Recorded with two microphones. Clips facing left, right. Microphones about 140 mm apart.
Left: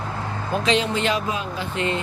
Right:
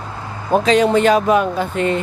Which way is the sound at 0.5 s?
40° right (ahead or behind).